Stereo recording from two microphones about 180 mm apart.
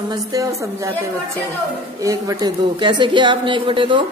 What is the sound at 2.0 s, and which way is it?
Speech, 20° right (ahead or behind).